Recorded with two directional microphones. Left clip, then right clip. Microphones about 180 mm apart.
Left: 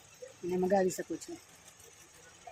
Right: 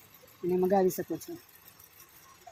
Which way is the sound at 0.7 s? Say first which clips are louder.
Right 1 dB; 15° right (ahead or behind).